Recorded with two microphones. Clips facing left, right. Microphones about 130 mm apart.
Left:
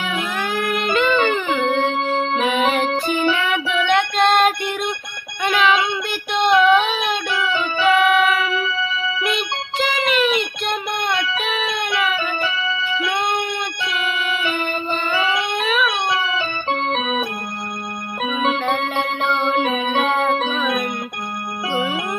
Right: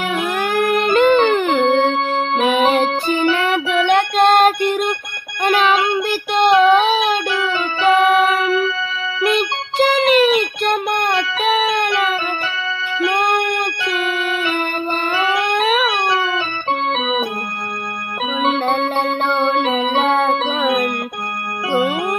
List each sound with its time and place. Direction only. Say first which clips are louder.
0.1 s music: right 5 dB; 50° right (ahead or behind)
5.4 s child singing: right 3 dB; 45° right (ahead or behind)
7.1 s music: right 3 dB; 40° right (ahead or behind)
18.7 s music: right 3 dB; 45° right (ahead or behind)